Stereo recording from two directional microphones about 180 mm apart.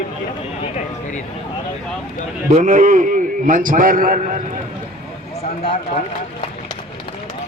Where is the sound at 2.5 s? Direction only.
40° right (ahead or behind).